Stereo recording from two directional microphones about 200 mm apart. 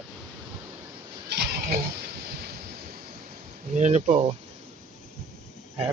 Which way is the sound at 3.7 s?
35° right (ahead or behind).